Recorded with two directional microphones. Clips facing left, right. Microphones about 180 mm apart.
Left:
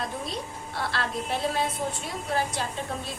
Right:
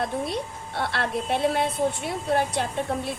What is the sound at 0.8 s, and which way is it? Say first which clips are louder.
A woman's voice: right 4 dB; 60° right (ahead or behind).